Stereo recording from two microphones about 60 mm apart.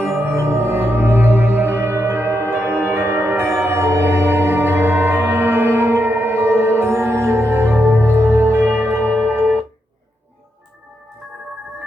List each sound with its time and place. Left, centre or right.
0.0 s music: right